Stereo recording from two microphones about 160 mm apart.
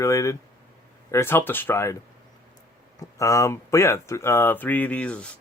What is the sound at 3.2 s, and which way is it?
Speech, 20° left (ahead or behind).